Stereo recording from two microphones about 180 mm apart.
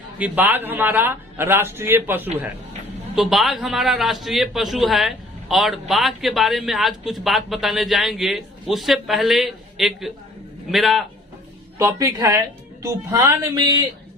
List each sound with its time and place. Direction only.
0.2 s a man's voice: 10° right (ahead or behind)
3.2 s speech: centre (ahead or behind)
11.8 s a man's voice: 15° right (ahead or behind)